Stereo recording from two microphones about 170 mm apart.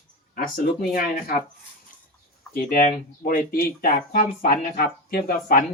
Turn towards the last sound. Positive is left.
turn(degrees=55)  # may be behind; listen again after turning